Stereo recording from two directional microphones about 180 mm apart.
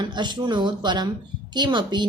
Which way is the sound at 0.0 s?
25° right (ahead or behind).